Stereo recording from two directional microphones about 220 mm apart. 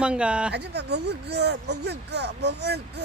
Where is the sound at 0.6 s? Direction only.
50° right (ahead or behind).